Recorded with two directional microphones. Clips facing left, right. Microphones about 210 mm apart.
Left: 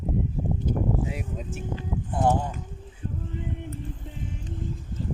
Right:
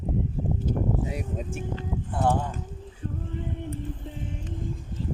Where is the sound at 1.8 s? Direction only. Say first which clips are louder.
Left 3 dB; 15° left (ahead or behind).